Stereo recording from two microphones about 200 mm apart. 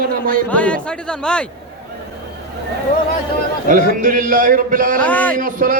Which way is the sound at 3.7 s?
40° right (ahead or behind).